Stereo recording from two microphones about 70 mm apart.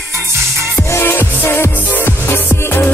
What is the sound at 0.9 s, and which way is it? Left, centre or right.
Music, left.